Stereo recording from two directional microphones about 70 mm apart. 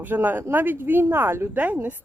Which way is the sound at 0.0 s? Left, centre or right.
Right.